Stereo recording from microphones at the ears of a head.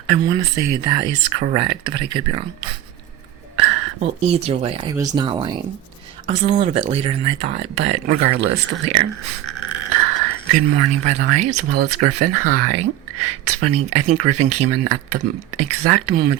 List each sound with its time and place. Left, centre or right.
0.1 s speech: right